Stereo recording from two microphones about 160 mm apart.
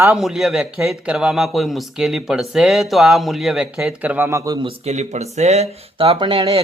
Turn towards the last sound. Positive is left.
turn(degrees=-35)  # may be behind; listen again after turning